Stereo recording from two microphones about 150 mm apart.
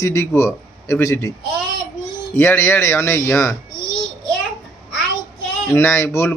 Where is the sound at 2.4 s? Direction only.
15° left (ahead or behind).